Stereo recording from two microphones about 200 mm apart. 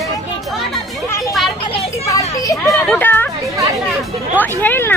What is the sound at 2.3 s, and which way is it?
Children playing, 15° left (ahead or behind).